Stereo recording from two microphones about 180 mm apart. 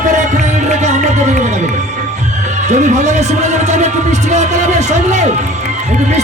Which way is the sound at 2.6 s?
40° right (ahead or behind).